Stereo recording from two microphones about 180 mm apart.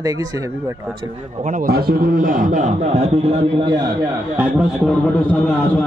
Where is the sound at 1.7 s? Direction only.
60° right (ahead or behind); by 3.9 s 25° right (ahead or behind).